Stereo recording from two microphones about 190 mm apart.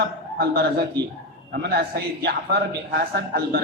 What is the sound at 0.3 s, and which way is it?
A man's voice, 55° right (ahead or behind).